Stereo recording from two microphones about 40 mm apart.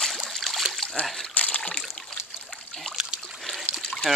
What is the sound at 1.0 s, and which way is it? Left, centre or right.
Speech, left.